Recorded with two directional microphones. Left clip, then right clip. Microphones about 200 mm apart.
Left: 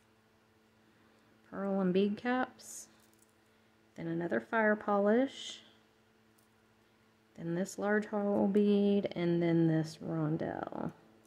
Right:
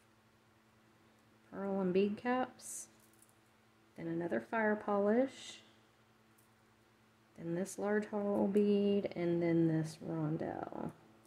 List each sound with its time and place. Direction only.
1.5 s speech: 15° left (ahead or behind)
3.9 s speech: 15° left (ahead or behind)
7.3 s speech: 15° left (ahead or behind)